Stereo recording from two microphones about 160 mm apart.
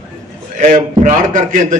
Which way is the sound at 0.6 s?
50° right (ahead or behind).